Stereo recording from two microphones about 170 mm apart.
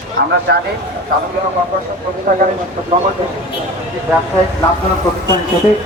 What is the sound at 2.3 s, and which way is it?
Speech, 60° right (ahead or behind).